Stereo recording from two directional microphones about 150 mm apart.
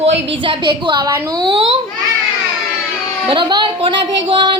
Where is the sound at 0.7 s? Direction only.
25° right (ahead or behind).